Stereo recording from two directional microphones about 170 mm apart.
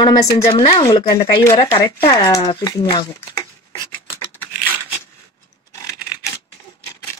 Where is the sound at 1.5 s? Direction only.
35° left (ahead or behind).